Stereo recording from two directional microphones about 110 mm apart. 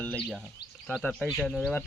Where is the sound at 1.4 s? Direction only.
10° left (ahead or behind).